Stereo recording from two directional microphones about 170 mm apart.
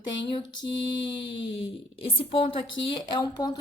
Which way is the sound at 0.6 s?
30° left (ahead or behind).